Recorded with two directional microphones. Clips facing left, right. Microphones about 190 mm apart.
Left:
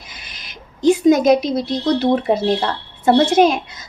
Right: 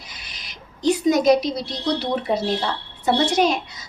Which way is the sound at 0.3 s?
50° left (ahead or behind).